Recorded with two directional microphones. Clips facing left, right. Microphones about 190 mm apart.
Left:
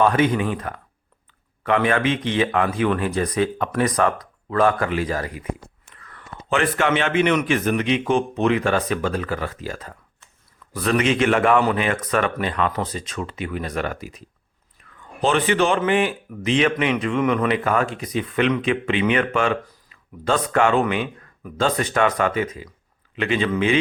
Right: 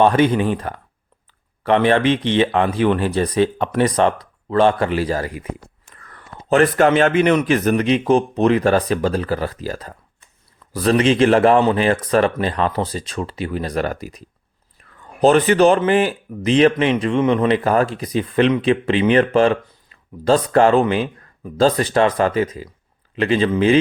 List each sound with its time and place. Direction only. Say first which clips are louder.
0.0 s speech: right 4 dB; 30° right (ahead or behind)